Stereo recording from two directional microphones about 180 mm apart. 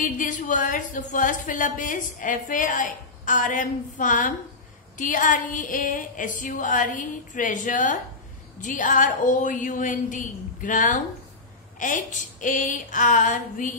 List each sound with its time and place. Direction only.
0.0 s a woman's voice: 45° left (ahead or behind)